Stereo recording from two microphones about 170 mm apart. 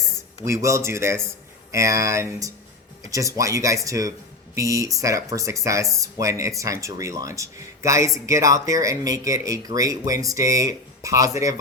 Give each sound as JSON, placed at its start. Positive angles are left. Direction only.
{"t": 0.4, "sound": "speech", "side_deg": -15}